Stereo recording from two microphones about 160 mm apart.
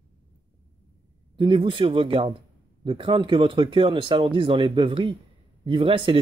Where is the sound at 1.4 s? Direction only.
30° right (ahead or behind).